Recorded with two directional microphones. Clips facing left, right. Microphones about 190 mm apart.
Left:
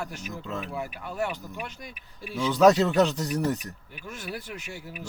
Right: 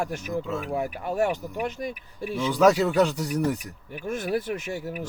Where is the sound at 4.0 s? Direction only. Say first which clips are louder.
Right 10 dB; 50° right (ahead or behind).